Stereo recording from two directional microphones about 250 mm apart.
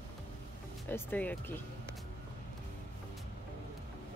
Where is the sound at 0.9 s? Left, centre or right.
Centre.